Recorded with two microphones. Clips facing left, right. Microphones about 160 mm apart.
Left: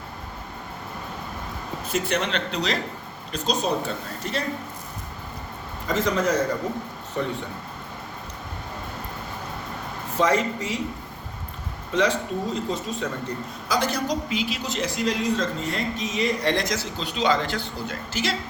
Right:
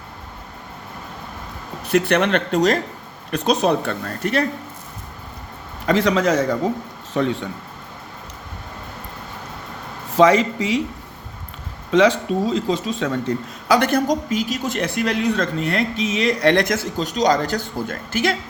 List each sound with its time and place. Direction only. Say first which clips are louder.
1.9 s speech: right 8 dB; 65° right (ahead or behind); by 2.7 s 45° right (ahead or behind)
3.3 s speech: right 7 dB; 65° right (ahead or behind)
5.8 s a man's voice: right 6 dB; 75° right (ahead or behind); by 7.3 s 90° right
10.2 s speech: right 8 dB; 90° right
11.9 s speech: right 7 dB; 90° right; by 18.3 s 55° right (ahead or behind)